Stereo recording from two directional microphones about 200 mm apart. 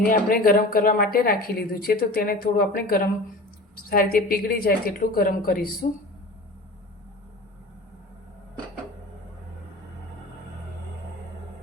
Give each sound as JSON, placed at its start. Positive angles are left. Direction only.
{"t": 0.0, "sound": "speech", "side_deg": 45}